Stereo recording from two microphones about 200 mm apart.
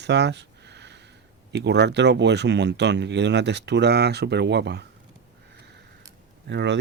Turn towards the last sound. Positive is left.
turn(degrees=-60)  # may be behind; listen again after turning